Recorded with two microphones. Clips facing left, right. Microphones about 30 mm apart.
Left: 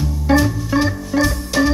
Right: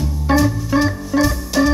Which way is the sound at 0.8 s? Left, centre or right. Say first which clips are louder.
Even; centre.